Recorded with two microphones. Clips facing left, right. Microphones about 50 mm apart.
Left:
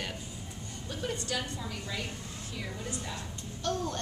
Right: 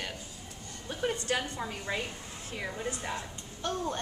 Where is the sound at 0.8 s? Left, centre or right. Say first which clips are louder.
Right 4 dB; right.